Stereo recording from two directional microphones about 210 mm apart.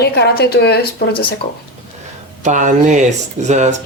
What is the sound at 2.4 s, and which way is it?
Speech, 35° right (ahead or behind).